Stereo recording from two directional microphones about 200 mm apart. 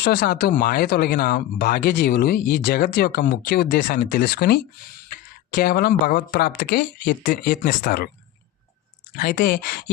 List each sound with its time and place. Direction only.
0.0 s speech: 50° left (ahead or behind)
9.1 s speech: 45° left (ahead or behind)